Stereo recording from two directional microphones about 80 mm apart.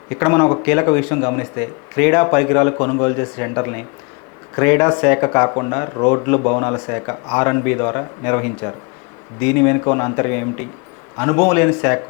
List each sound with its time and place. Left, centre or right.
0.1 s speech: left
6.2 s speech: left